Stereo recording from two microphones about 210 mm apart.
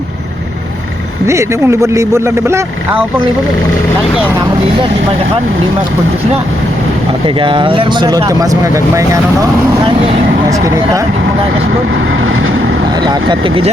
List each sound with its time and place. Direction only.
1.3 s speech: 15° right (ahead or behind)
7.3 s speech: 25° right (ahead or behind)
13.0 s speech: 20° right (ahead or behind)